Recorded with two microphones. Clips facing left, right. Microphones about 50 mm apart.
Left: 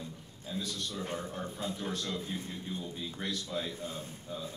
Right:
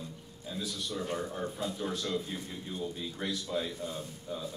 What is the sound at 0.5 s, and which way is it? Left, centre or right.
Speech, centre.